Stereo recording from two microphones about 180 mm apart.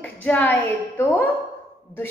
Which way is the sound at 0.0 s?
10° left (ahead or behind).